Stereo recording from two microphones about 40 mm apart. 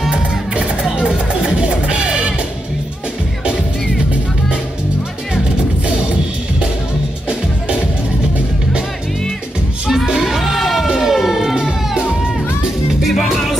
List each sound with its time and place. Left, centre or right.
0.6 s music: right
10.0 s music: centre
10.9 s siren: centre
11.1 s music: centre
13.0 s music: centre